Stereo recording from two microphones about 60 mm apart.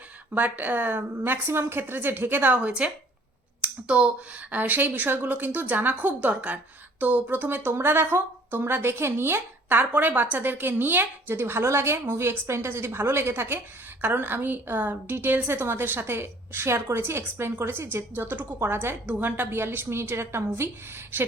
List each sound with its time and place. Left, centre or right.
0.3 s a woman's voice: right
2.6 s a woman's voice: centre; by 9.8 s right
9.9 s a woman's voice: right